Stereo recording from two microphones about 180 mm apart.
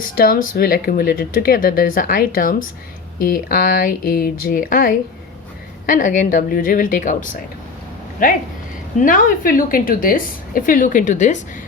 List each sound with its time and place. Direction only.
0.0 s speech: 50° left (ahead or behind)